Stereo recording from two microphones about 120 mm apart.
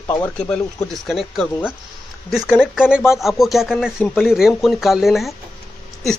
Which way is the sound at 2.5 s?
5° right (ahead or behind).